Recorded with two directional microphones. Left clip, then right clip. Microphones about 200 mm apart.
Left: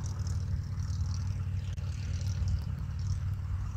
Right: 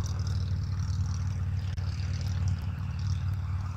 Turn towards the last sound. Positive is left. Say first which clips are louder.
# right 4 dB
turn(degrees=-20)  # may be behind; listen again after turning